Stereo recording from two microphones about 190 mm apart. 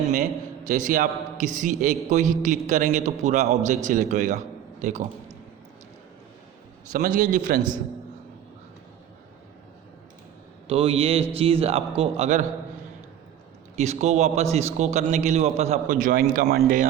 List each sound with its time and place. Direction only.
0.1 s a man's voice: 45° right (ahead or behind)
6.9 s a man's voice: 45° right (ahead or behind)
10.7 s a man's voice: 30° right (ahead or behind)
13.7 s a man's voice: 35° right (ahead or behind)